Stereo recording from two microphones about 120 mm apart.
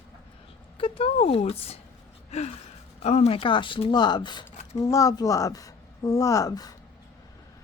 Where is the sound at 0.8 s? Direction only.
50° left (ahead or behind).